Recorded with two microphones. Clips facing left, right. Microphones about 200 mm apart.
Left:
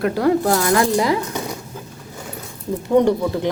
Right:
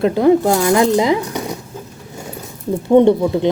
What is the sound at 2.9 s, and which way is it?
Speech, 25° right (ahead or behind).